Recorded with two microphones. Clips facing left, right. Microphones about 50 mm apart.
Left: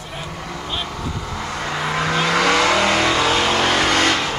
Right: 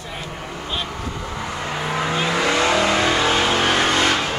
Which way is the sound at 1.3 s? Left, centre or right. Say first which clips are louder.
Left 1 dB; left.